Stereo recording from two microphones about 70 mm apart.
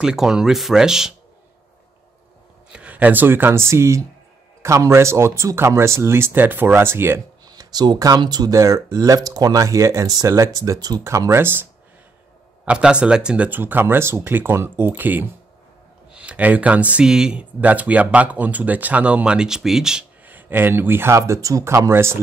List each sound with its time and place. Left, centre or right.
0.0 s speech: centre
2.7 s speech: centre
7.5 s speech: right
8.5 s speech: right
11.1 s speech: right
12.6 s speech: centre
13.5 s speech: right
17.0 s speech: centre
20.2 s speech: right